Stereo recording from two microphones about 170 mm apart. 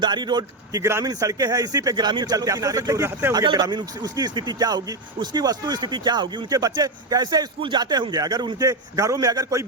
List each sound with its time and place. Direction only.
0.0 s a man's voice: 25° right (ahead or behind)
3.4 s a man's voice: 25° right (ahead or behind)